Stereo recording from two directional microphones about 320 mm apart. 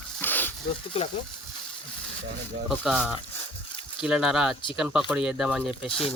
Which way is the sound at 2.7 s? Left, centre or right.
Centre.